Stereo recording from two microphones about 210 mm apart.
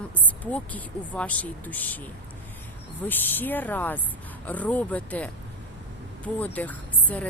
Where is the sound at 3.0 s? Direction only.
10° left (ahead or behind).